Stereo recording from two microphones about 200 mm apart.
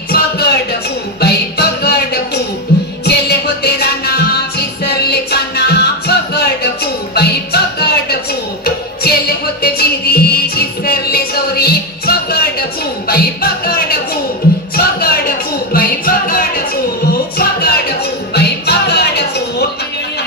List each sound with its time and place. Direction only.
0.1 s music: 55° left (ahead or behind)
9.6 s music: 50° left (ahead or behind)